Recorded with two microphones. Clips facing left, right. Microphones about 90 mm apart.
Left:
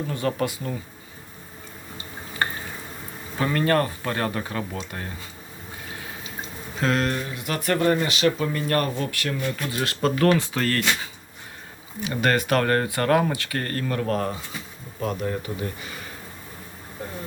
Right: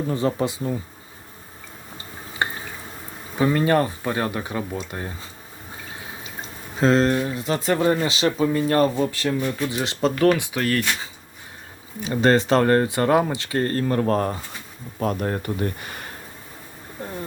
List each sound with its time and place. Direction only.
0.1 s speech: 20° right (ahead or behind)
2.4 s drip: 20° right (ahead or behind)
3.3 s speech: 15° right (ahead or behind)
6.7 s speech: 25° right (ahead or behind)
10.2 s speech: 10° right (ahead or behind)
12.0 s speech: 25° right (ahead or behind)
15.0 s speech: 50° right (ahead or behind)